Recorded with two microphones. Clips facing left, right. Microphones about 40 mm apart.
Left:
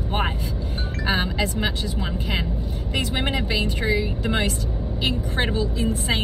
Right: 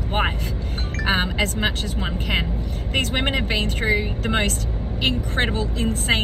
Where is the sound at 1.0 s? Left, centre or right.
Right.